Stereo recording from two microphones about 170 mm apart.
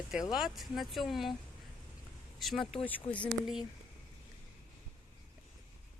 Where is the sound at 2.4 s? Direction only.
Centre (ahead or behind).